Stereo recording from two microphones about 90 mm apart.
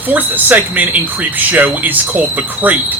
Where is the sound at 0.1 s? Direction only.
20° right (ahead or behind).